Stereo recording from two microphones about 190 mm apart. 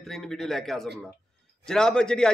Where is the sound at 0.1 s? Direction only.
Centre (ahead or behind).